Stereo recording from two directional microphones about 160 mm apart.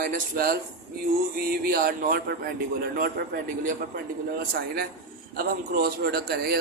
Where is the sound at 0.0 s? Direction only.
60° right (ahead or behind).